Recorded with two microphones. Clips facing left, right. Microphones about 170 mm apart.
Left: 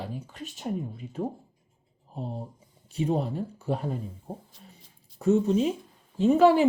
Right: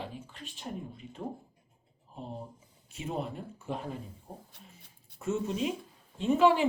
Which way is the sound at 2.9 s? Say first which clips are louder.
Left 8 dB; 35° left (ahead or behind).